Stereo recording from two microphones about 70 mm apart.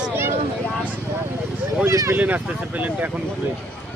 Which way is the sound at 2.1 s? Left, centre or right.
Right.